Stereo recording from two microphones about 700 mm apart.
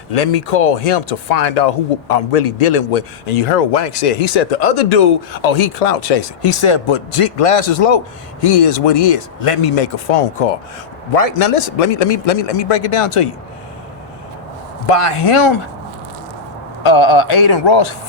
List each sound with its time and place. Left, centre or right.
0.1 s a man's voice: left
14.8 s a man's voice: left
16.8 s speech: left